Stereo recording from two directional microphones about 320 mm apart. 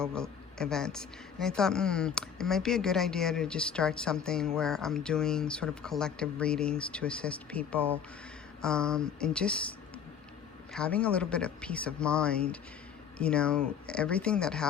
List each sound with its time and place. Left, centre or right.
0.0 s speech: centre
10.8 s speech: centre